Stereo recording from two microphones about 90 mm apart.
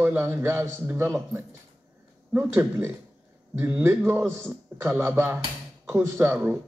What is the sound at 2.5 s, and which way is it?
Speech, 25° right (ahead or behind).